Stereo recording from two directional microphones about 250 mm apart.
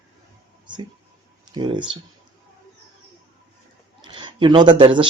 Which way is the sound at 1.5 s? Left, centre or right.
Centre.